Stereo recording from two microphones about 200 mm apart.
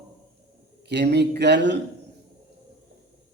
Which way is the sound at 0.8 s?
55° right (ahead or behind).